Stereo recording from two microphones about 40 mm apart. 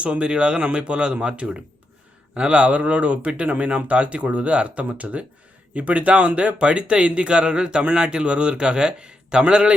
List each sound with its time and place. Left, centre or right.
0.0 s speech: right